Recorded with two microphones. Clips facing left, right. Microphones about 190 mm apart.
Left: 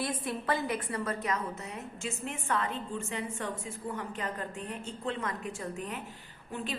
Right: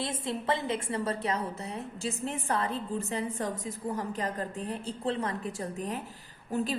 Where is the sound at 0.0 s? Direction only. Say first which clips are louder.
Right 1 dB; 25° right (ahead or behind).